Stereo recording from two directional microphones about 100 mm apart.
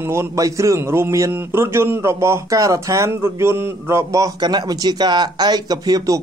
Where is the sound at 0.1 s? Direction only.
30° right (ahead or behind).